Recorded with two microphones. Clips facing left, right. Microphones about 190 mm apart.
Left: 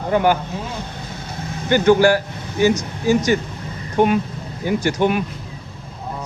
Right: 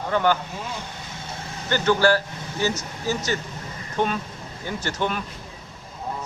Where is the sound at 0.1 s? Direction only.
15° left (ahead or behind).